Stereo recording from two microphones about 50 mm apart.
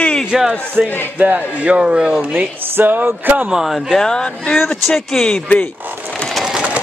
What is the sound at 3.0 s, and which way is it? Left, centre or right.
Speech, right.